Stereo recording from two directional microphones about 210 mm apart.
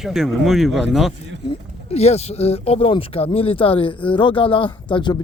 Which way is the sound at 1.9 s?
30° left (ahead or behind).